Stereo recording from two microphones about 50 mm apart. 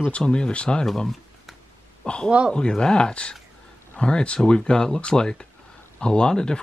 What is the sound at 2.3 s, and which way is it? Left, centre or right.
Speech, right.